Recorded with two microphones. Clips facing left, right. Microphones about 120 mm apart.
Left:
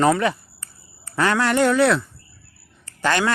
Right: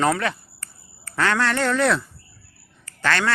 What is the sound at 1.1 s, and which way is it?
Speech, 10° left (ahead or behind).